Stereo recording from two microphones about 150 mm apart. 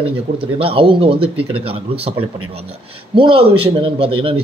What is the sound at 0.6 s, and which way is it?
Speech, 40° right (ahead or behind).